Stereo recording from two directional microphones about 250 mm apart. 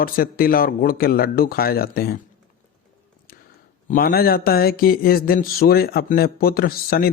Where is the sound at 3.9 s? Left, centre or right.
Left.